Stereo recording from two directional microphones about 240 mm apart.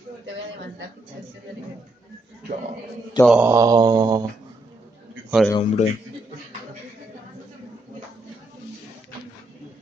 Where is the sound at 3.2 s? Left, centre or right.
Centre.